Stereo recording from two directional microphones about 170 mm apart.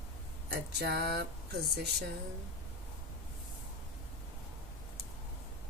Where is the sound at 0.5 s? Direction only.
70° right (ahead or behind).